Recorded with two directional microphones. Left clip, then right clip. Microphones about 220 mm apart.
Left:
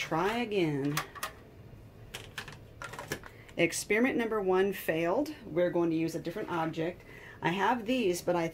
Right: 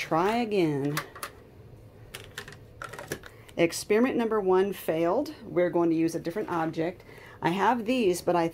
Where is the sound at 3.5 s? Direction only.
25° right (ahead or behind).